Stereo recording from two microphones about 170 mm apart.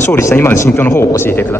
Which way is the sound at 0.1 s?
15° left (ahead or behind).